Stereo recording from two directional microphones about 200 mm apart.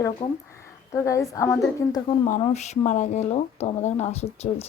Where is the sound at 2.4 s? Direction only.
35° left (ahead or behind).